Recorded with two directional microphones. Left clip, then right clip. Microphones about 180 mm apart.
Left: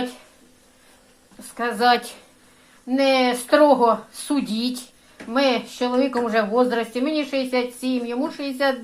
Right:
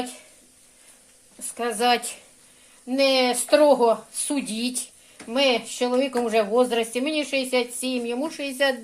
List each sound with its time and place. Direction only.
1.4 s speech: 35° right (ahead or behind)